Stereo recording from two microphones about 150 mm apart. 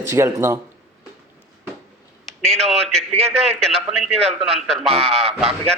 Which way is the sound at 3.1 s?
45° right (ahead or behind).